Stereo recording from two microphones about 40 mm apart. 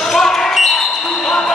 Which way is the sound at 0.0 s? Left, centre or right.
Centre.